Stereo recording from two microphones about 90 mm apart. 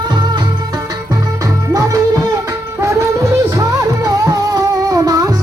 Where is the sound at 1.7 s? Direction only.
40° right (ahead or behind).